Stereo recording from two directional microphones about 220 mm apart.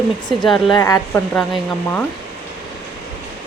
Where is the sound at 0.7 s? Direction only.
15° left (ahead or behind).